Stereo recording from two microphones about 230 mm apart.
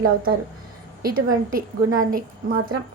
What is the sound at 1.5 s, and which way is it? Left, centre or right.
A woman's voice, right.